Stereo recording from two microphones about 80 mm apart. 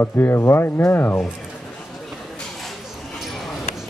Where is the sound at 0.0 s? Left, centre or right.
Left.